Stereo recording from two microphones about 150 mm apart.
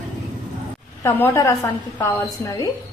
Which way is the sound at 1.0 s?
15° left (ahead or behind).